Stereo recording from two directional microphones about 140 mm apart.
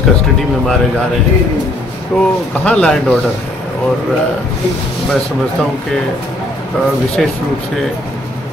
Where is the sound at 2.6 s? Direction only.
5° left (ahead or behind).